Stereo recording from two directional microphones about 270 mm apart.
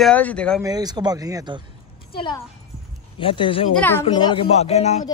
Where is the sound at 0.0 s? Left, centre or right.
Centre.